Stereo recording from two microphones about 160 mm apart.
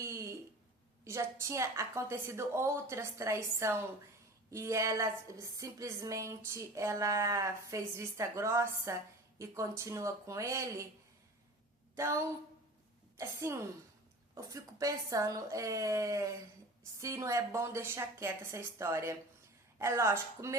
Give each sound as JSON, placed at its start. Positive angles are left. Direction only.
{"t": 0.0, "sound": "a sound", "side_deg": -15}
{"t": 1.0, "sound": "a woman's voice", "side_deg": -15}
{"t": 11.9, "sound": "a woman's voice", "side_deg": -20}